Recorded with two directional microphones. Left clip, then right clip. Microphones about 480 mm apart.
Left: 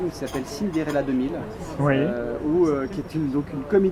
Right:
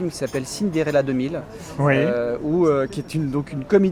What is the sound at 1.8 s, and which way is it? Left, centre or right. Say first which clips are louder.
Speech: right 3 dB; right.